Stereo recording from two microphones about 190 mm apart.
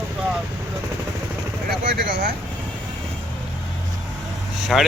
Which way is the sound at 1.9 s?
60° right (ahead or behind).